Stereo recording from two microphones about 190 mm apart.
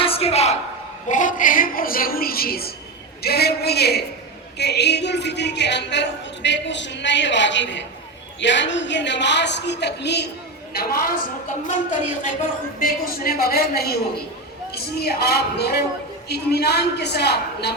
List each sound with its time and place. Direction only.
0.0 s a sound: 30° left (ahead or behind)
1.0 s a woman's voice: 40° left (ahead or behind); by 10.2 s 60° left (ahead or behind)
10.8 s a woman's voice: 50° left (ahead or behind)
12.8 s a woman's voice: 50° left (ahead or behind)